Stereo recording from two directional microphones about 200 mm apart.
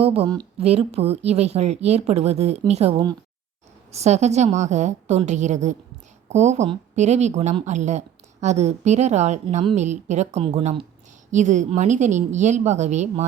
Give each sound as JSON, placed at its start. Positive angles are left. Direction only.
{"t": 0.0, "sound": "a woman's voice", "side_deg": -30}